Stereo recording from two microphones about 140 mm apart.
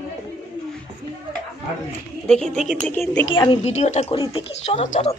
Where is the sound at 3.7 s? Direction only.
55° left (ahead or behind).